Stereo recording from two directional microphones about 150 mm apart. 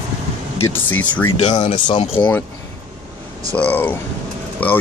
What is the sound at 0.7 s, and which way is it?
Speech, 10° left (ahead or behind).